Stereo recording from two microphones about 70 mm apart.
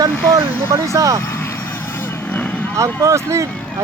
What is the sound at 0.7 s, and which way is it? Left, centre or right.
Speech, right.